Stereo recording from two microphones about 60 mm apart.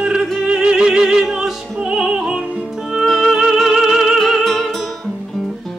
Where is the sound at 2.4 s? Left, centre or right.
Right.